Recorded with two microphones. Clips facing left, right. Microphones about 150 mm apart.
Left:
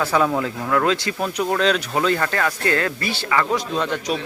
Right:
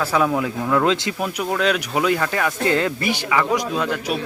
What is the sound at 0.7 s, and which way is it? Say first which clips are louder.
Speech: right 1 dB; 20° right (ahead or behind).